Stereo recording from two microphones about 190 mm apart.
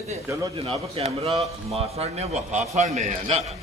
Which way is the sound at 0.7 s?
30° right (ahead or behind).